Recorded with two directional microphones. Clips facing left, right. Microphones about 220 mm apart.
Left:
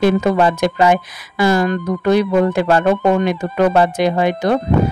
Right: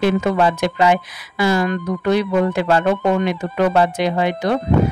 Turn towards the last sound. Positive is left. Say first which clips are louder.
# left 3 dB
turn(degrees=45)  # may be behind; listen again after turning